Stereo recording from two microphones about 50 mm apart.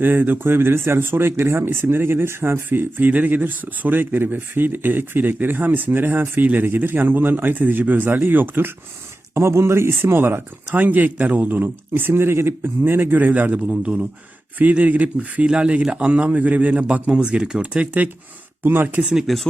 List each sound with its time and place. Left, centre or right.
0.0 s a man's voice: right
9.3 s speech: right
10.8 s a man's voice: right
13.7 s a man's voice: centre
14.6 s a man's voice: right
16.9 s a man's voice: right
18.6 s speech: right
19.3 s speech: centre